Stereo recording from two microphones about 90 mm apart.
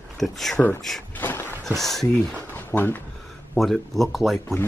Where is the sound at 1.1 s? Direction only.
25° left (ahead or behind).